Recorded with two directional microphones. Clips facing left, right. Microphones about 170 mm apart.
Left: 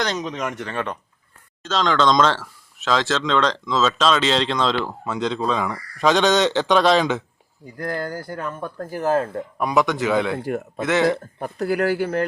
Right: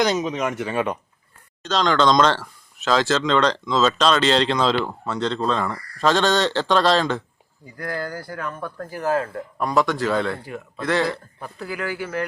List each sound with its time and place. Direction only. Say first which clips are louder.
0.0 s speech: right 4 dB; 5° right (ahead or behind)
1.6 s speech: even; centre (ahead or behind); by 11.1 s 20° left (ahead or behind)
11.1 s speech: left 8 dB; 50° left (ahead or behind)